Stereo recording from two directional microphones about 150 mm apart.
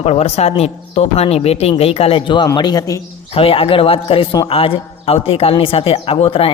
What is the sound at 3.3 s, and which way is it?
Speech, 40° left (ahead or behind).